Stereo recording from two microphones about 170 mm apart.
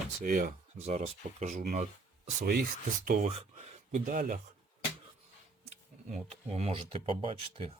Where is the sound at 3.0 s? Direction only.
45° right (ahead or behind).